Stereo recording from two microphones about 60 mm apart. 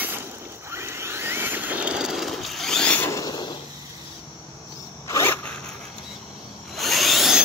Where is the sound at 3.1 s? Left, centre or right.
Left.